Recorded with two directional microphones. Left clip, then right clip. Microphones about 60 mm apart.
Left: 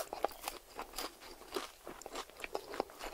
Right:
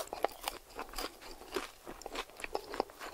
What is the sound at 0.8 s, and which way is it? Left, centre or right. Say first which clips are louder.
Crunch: right 2 dB; right.